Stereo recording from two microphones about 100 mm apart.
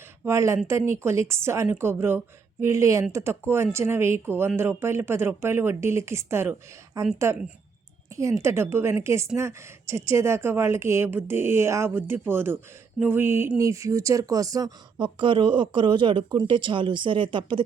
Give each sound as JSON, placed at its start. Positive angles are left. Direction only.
{"t": 0.3, "sound": "speech", "side_deg": -30}
{"t": 8.1, "sound": "speech", "side_deg": -30}
{"t": 14.9, "sound": "speech", "side_deg": -55}